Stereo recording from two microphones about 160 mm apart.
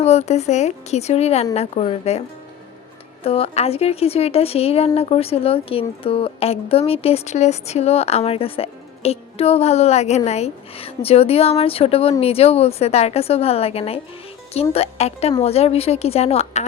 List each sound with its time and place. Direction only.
0.0 s speech: 40° left (ahead or behind)
3.2 s speech: 40° left (ahead or behind)